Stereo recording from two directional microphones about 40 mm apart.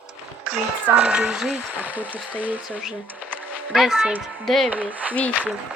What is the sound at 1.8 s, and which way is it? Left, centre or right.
Speech, right.